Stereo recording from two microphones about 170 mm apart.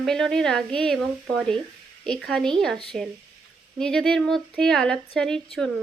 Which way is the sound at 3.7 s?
5° left (ahead or behind).